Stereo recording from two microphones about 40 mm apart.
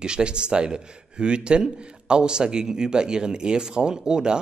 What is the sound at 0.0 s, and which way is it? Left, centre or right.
A man's voice, right.